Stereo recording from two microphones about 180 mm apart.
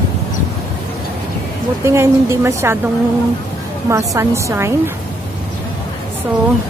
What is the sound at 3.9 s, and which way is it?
A woman's voice, 15° right (ahead or behind).